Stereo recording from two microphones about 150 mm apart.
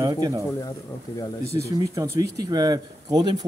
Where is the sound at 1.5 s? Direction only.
20° right (ahead or behind).